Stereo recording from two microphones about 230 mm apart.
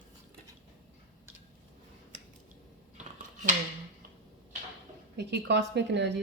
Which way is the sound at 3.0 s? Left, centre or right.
Right.